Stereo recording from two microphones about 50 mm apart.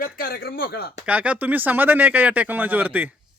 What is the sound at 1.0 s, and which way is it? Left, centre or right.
Speech, right.